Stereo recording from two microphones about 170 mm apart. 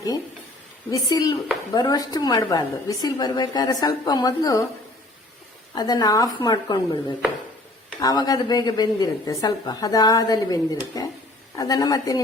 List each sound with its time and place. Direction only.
0.9 s a woman's voice: 20° left (ahead or behind)
5.7 s a woman's voice: 25° left (ahead or behind)
8.0 s a woman's voice: 20° left (ahead or behind)